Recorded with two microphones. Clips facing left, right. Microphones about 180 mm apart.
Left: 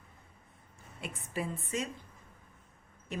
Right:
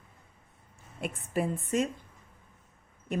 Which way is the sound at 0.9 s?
50° right (ahead or behind).